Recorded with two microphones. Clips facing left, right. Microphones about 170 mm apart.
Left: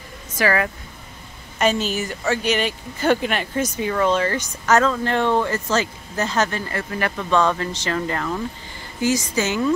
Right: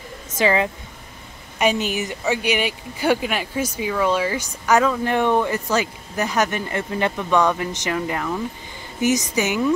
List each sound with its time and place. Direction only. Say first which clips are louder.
0.4 s speech: right 1 dB; 20° right (ahead or behind)